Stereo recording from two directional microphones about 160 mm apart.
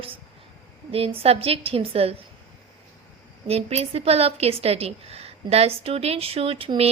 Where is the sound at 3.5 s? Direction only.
40° right (ahead or behind).